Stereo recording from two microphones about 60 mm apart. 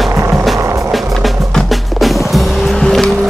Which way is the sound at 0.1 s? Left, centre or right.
Right.